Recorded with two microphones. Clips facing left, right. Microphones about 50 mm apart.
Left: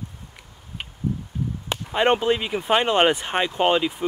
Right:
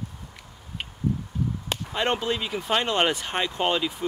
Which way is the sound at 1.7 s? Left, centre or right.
Left.